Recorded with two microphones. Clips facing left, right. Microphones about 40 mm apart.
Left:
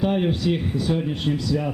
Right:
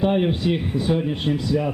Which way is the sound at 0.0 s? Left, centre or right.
Centre.